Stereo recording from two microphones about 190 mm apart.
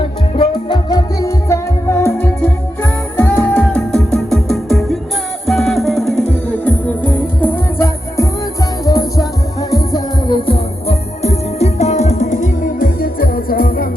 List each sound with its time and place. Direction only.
0.0 s music: 25° left (ahead or behind); by 13.8 s 50° left (ahead or behind)